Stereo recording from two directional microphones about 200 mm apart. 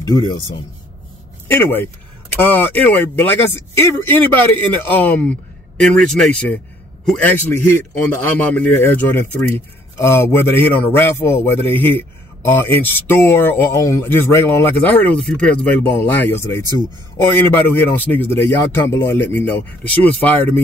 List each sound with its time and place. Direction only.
0.0 s a man's voice: 20° left (ahead or behind)
1.5 s speech: 10° left (ahead or behind)